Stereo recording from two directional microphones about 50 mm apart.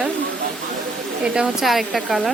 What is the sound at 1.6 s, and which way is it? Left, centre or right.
Speech, centre.